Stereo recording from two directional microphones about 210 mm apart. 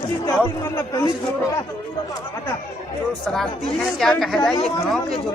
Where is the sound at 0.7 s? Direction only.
15° left (ahead or behind).